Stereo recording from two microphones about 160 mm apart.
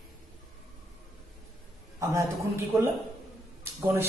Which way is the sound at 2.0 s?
20° right (ahead or behind).